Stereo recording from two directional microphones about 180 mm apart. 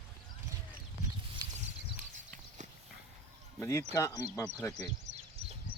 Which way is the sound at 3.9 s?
15° left (ahead or behind).